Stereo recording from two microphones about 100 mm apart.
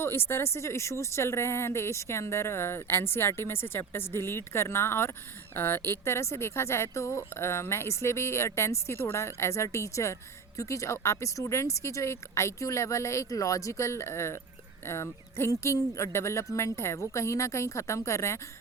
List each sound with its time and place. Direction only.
0.0 s a woman's voice: 25° left (ahead or behind)